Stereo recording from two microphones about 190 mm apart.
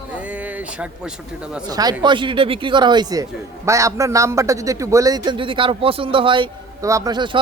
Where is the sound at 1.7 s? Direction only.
20° right (ahead or behind).